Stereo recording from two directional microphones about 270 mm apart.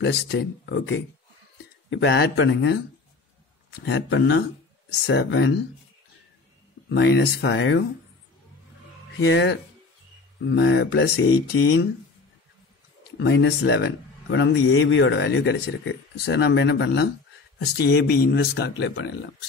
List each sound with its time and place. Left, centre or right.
0.0 s speech: left
3.8 s speech: left
6.9 s speech: left
9.3 s speech: left
13.2 s speech: left